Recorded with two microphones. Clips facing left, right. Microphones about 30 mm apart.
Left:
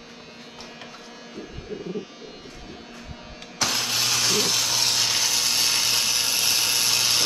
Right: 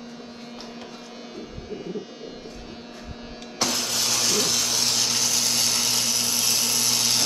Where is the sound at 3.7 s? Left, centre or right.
Left.